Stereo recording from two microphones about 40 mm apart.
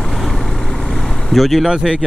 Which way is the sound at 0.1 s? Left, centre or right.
Centre.